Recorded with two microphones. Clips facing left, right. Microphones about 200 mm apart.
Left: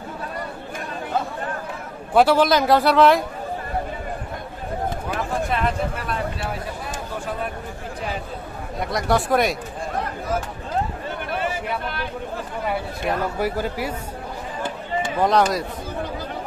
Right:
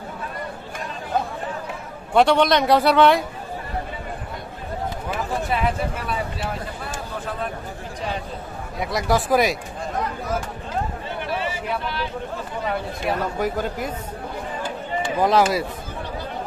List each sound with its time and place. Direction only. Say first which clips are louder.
2.1 s a man's voice: left 1 dB; 5° left (ahead or behind)
5.5 s a man's voice: even; 5° right (ahead or behind)
8.7 s a man's voice: even; centre (ahead or behind)
11.3 s a sound: left 2 dB; 50° left (ahead or behind)
11.8 s speech: right 1 dB; 55° left (ahead or behind)
12.6 s speech: even; 5° left (ahead or behind)
15.1 s a man's voice: right 1 dB; centre (ahead or behind)